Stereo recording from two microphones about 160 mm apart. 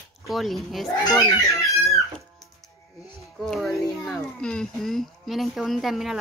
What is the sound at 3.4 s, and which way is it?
Speech, 5° left (ahead or behind).